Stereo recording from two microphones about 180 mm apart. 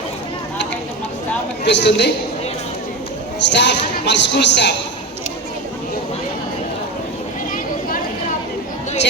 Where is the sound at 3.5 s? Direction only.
75° left (ahead or behind).